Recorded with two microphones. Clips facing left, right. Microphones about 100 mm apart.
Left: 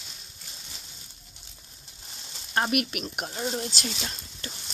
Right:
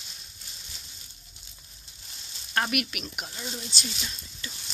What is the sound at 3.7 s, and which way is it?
Speech, 75° left (ahead or behind).